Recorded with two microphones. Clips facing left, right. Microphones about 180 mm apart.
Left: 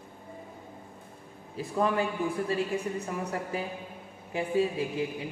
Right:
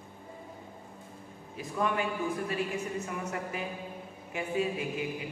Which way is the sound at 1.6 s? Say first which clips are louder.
Left 3 dB; 30° left (ahead or behind).